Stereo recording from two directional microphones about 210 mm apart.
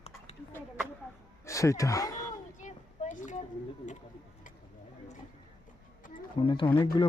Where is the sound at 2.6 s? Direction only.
35° left (ahead or behind).